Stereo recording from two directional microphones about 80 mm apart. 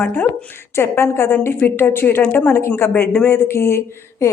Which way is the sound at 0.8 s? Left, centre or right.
Left.